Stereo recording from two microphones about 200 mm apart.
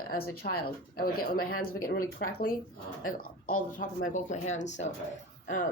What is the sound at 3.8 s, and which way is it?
Speech, 40° left (ahead or behind).